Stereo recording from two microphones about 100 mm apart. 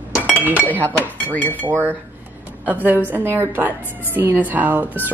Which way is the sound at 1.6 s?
20° right (ahead or behind).